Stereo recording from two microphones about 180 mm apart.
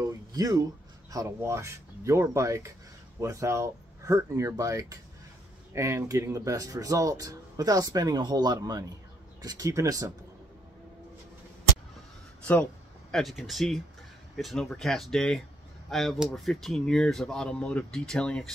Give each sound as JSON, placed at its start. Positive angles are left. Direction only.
{"t": 0.0, "sound": "speech", "side_deg": -20}
{"t": 13.1, "sound": "speech", "side_deg": 0}